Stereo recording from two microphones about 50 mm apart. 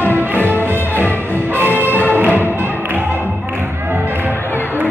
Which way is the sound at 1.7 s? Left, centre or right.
Left.